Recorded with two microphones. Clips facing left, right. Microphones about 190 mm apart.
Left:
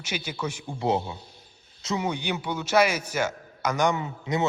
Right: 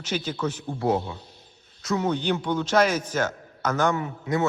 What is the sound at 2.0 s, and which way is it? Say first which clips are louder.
A man's voice: right 4 dB; 10° left (ahead or behind).